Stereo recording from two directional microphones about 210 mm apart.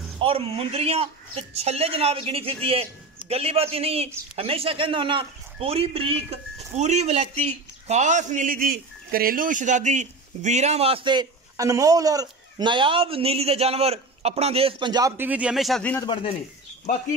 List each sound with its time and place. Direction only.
0.2 s speech: 25° right (ahead or behind); by 16.1 s 5° left (ahead or behind)